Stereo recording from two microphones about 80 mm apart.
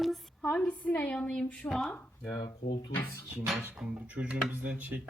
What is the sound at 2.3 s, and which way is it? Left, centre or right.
Speech, left.